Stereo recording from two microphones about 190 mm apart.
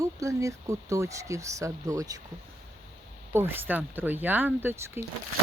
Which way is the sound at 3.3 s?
10° right (ahead or behind).